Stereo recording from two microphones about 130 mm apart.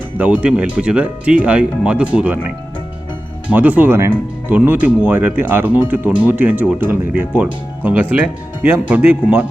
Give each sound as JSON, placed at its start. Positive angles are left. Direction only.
{"t": 0.2, "sound": "speech", "side_deg": -10}
{"t": 3.5, "sound": "speech", "side_deg": -10}